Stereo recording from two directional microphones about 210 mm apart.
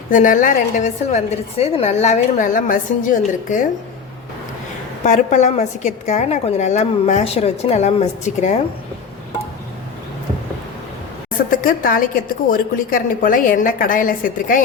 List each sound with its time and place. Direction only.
0.1 s a woman's voice: 35° left (ahead or behind)
5.0 s a woman's voice: 35° left (ahead or behind)
11.5 s a woman's voice: 40° left (ahead or behind)